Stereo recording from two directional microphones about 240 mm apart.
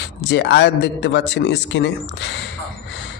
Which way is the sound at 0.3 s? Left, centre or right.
Left.